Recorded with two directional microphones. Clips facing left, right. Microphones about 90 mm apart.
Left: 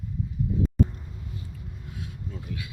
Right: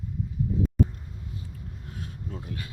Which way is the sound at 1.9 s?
40° right (ahead or behind).